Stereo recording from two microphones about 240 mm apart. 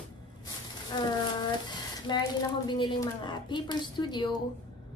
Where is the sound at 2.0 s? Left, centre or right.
Centre.